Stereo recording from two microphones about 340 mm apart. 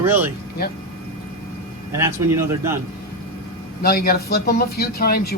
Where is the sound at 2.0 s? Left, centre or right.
Centre.